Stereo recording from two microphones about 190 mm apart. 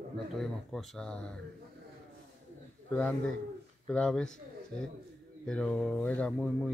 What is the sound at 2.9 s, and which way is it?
Speech, 10° left (ahead or behind).